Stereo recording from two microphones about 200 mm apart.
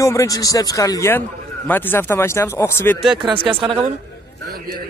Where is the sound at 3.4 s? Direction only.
25° right (ahead or behind).